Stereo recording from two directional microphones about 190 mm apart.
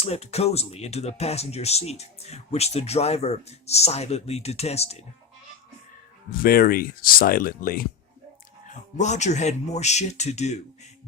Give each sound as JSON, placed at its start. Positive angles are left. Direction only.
{"t": 0.0, "sound": "speech", "side_deg": 35}
{"t": 6.3, "sound": "speech", "side_deg": 50}